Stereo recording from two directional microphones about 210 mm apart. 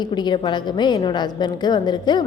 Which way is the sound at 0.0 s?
20° left (ahead or behind).